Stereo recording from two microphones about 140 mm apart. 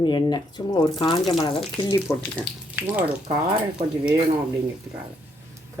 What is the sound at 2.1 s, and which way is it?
Speech, 20° left (ahead or behind).